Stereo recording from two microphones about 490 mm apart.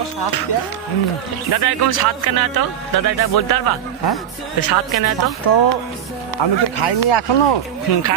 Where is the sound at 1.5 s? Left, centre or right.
Left.